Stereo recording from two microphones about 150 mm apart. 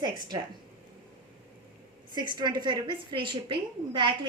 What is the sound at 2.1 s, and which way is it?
A woman's voice, 30° right (ahead or behind).